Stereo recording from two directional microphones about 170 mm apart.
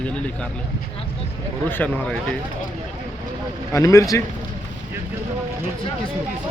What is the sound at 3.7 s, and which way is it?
Speech, 20° left (ahead or behind).